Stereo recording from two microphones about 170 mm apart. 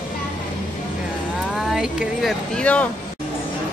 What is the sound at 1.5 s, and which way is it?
Speech, 5° right (ahead or behind).